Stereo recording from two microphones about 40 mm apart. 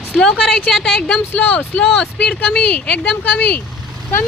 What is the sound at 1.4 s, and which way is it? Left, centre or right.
Speech, left.